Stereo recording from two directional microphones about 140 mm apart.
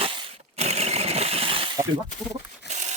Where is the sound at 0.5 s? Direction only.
50° right (ahead or behind).